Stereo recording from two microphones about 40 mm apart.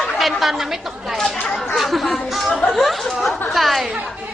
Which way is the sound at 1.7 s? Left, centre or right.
Centre.